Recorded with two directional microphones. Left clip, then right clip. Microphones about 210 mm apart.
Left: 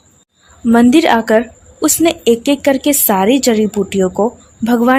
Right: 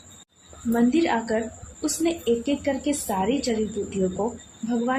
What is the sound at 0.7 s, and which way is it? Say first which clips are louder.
Speech: left 12 dB; 55° left (ahead or behind).